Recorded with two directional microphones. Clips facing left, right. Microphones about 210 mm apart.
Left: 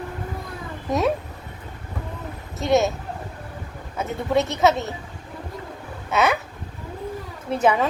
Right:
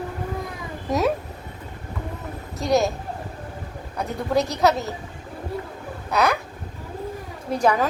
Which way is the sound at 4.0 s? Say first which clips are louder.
Left 1 dB; centre (ahead or behind).